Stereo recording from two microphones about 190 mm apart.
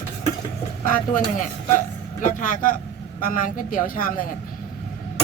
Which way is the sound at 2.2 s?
40° left (ahead or behind).